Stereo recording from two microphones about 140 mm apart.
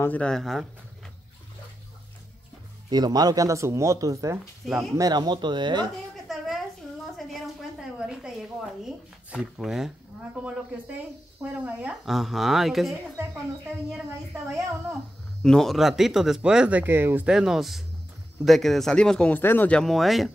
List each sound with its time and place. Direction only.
0.0 s speech: 10° left (ahead or behind)
2.9 s speech: 30° right (ahead or behind)
6.2 s a sound: centre (ahead or behind)
11.4 s speech: 10° right (ahead or behind)
12.1 s speech: centre (ahead or behind)
13.2 s speech: 15° right (ahead or behind)
15.4 s speech: 5° left (ahead or behind)